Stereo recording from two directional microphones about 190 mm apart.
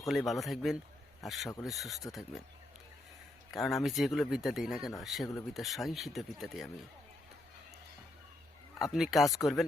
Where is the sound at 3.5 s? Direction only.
Centre (ahead or behind).